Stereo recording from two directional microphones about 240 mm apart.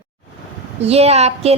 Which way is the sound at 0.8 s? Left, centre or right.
Right.